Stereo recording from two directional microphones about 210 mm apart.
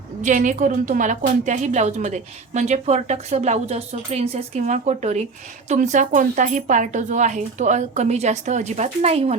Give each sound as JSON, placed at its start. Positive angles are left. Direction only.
{"t": 0.2, "sound": "a woman's voice", "side_deg": -35}